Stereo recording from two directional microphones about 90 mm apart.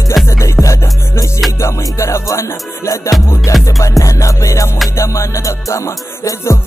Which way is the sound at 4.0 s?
40° left (ahead or behind).